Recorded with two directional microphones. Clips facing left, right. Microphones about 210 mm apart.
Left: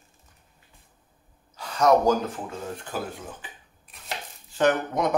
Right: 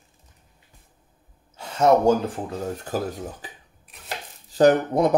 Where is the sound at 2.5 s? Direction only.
40° right (ahead or behind).